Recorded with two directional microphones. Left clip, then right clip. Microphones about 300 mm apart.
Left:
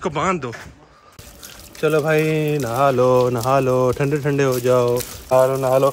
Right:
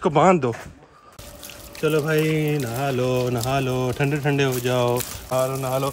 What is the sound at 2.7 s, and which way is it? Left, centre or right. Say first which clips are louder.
Speech: left 12 dB; centre.